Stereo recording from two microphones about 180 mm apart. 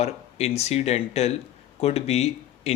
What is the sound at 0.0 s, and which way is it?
Speech, 35° left (ahead or behind).